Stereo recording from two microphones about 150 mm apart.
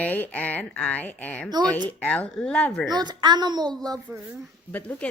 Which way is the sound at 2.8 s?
30° right (ahead or behind).